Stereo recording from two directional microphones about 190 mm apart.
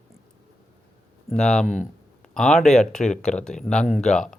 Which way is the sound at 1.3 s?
5° left (ahead or behind).